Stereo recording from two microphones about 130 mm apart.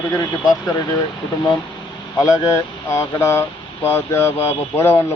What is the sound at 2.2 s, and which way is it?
Speech, 25° left (ahead or behind).